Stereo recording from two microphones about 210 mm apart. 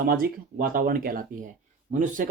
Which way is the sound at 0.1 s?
45° right (ahead or behind).